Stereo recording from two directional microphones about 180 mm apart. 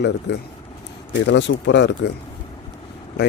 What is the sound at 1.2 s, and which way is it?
Speech, 85° left.